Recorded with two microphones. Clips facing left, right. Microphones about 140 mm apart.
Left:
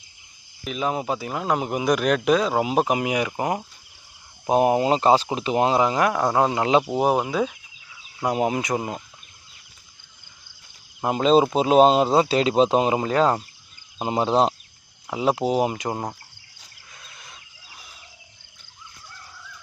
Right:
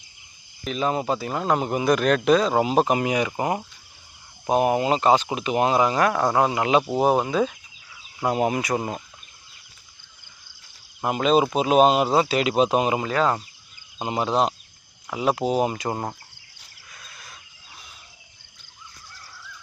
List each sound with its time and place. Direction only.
0.6 s speech: 10° left (ahead or behind)
3.3 s speech: 5° right (ahead or behind)
4.4 s speech: 25° left (ahead or behind)
11.0 s speech: 30° left (ahead or behind)
16.9 s fowl: 20° left (ahead or behind)